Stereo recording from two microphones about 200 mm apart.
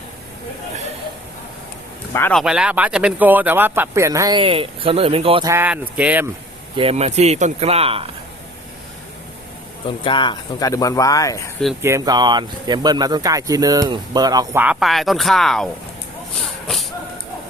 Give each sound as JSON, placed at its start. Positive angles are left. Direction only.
{"t": 2.1, "sound": "speech", "side_deg": 10}
{"t": 2.4, "sound": "speech", "side_deg": -5}
{"t": 5.5, "sound": "speech", "side_deg": -10}
{"t": 6.7, "sound": "speech", "side_deg": -30}
{"t": 9.8, "sound": "speech", "side_deg": 25}
{"t": 11.8, "sound": "speech", "side_deg": -15}